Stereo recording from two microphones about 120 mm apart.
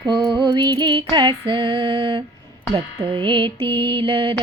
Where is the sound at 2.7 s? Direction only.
55° right (ahead or behind).